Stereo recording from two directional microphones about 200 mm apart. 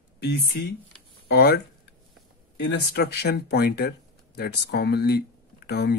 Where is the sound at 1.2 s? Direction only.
55° left (ahead or behind).